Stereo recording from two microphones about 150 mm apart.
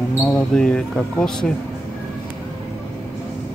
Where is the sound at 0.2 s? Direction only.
5° left (ahead or behind).